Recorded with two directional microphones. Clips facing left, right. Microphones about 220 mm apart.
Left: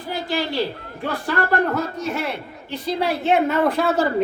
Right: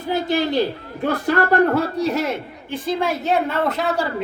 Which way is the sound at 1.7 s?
35° right (ahead or behind).